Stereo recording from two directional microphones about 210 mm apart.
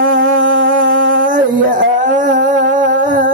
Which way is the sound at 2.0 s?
40° right (ahead or behind).